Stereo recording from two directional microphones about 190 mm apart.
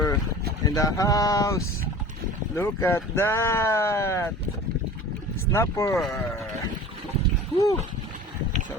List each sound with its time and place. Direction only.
0.6 s speech: 20° left (ahead or behind)
5.5 s speech: 15° left (ahead or behind)
7.6 s speech: 15° left (ahead or behind)